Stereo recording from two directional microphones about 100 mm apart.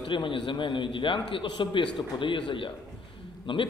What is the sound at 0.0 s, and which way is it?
A man's voice, 55° left (ahead or behind).